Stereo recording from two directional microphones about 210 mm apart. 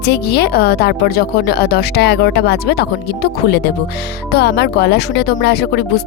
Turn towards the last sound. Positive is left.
turn(degrees=50)  # may be behind; listen again after turning